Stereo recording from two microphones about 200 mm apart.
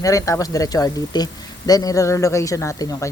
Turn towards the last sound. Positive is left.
turn(degrees=15)  # may be behind; listen again after turning